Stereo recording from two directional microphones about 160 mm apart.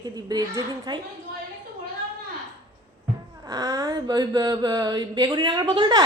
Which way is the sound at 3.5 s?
25° right (ahead or behind).